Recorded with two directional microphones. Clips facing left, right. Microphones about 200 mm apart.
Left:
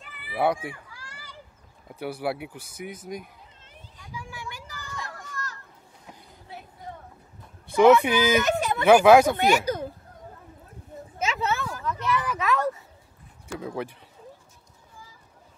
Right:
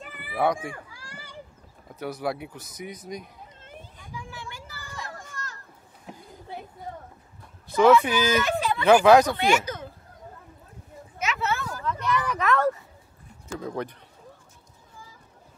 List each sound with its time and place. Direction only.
0.0 s cat: 45° right (ahead or behind)
0.3 s speech: 5° left (ahead or behind)
2.0 s speech: 10° left (ahead or behind)
4.0 s vehicle: 10° left (ahead or behind)
5.0 s children playing: 25° right (ahead or behind)
7.7 s speech: 15° left (ahead or behind)
8.5 s a sound: 45° left (ahead or behind)
8.8 s speech: 10° left (ahead or behind)
9.4 s speech: 35° left (ahead or behind)
11.1 s a sound: 30° left (ahead or behind)
11.8 s a sound: 5° left (ahead or behind)
13.5 s speech: 10° left (ahead or behind)